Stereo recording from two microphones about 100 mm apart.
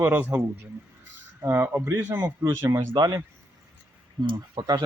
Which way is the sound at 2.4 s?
30° right (ahead or behind).